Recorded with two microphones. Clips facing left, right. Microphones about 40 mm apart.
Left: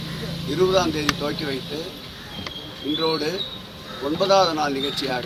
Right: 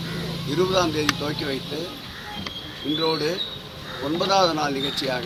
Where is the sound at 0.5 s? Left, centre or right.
Centre.